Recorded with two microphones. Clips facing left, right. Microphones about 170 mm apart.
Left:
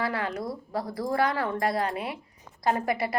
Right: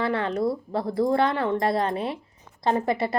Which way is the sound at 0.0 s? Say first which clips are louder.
Right 6 dB; 25° right (ahead or behind).